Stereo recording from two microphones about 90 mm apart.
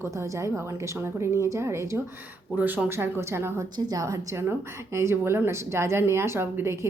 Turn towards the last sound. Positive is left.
turn(degrees=-25)  # may be behind; listen again after turning